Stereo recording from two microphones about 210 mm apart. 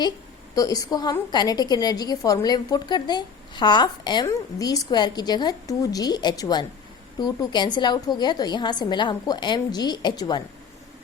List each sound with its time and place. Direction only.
0.5 s a woman's voice: 15° left (ahead or behind)